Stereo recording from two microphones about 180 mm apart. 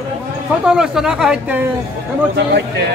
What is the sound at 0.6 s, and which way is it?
Speech, 5° right (ahead or behind).